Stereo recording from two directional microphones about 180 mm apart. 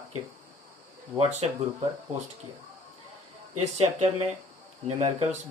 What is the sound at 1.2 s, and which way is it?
Speech, 40° right (ahead or behind).